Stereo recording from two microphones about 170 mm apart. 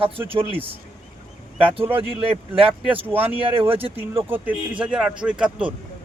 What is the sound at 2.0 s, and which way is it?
Speech, 35° right (ahead or behind).